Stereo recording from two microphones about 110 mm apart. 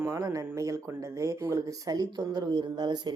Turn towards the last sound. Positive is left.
turn(degrees=-40)  # may be behind; listen again after turning